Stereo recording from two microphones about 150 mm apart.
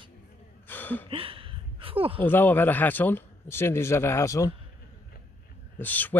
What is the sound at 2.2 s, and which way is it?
Speech, 15° left (ahead or behind).